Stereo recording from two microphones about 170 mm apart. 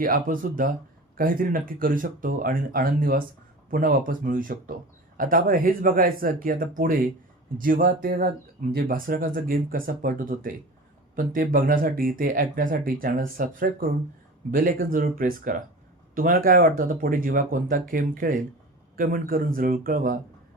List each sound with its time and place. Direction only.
0.0 s speech: 55° right (ahead or behind)